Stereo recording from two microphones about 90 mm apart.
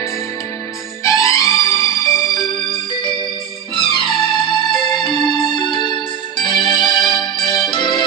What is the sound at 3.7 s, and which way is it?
Music, 65° left (ahead or behind).